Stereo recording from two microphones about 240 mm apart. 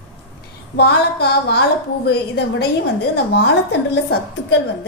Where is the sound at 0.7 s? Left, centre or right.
Left.